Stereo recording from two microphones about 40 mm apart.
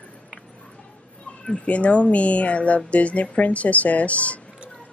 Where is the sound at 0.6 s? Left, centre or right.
Left.